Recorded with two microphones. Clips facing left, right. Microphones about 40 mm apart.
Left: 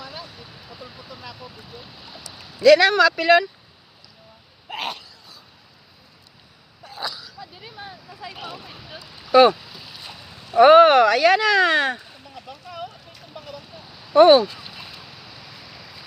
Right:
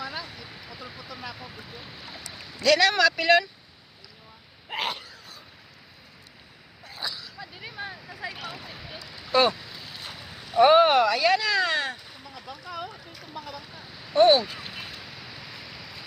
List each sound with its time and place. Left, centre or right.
0.0 s vehicle: centre
1.2 s a sound: centre
2.6 s speech: centre
4.7 s hiccup: centre
7.0 s a sound: centre
8.5 s a sound: centre
9.5 s boat: centre
10.6 s speech: left
12.2 s vehicle: centre
14.2 s speech: left
14.4 s a sound: centre
14.9 s vehicle: centre